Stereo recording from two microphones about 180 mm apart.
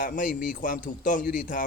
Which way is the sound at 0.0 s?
50° left (ahead or behind).